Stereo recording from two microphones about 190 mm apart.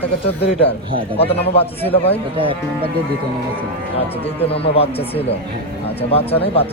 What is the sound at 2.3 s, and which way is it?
Livestock, 30° right (ahead or behind).